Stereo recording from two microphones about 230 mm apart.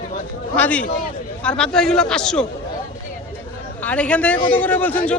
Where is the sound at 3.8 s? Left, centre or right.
Centre.